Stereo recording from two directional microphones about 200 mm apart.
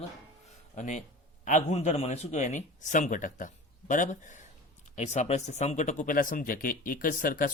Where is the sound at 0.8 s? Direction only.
40° left (ahead or behind).